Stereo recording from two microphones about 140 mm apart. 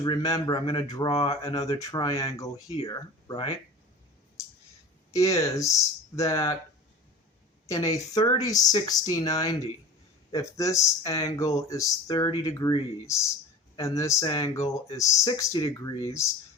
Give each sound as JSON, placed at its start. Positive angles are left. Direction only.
{"t": 0.0, "sound": "speech", "side_deg": 30}
{"t": 5.1, "sound": "speech", "side_deg": 20}
{"t": 7.7, "sound": "speech", "side_deg": 25}